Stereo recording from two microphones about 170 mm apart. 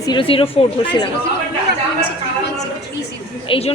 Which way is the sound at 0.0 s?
30° left (ahead or behind).